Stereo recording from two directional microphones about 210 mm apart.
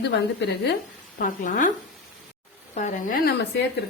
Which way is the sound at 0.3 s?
50° left (ahead or behind).